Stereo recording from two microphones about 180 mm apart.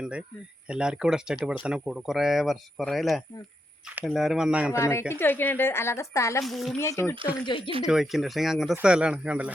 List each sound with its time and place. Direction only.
0.0 s speech: 5° right (ahead or behind)
4.7 s a woman's voice: 15° left (ahead or behind)
6.4 s speech: centre (ahead or behind)
6.7 s a woman's voice: 15° left (ahead or behind)
7.4 s speech: 25° left (ahead or behind)
7.9 s speech: centre (ahead or behind)